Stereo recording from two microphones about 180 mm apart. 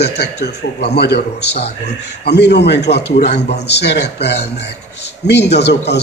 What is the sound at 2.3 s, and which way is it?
Speech, 70° left (ahead or behind).